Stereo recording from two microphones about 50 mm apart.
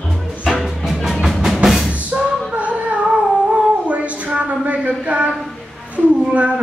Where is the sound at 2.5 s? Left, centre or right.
Right.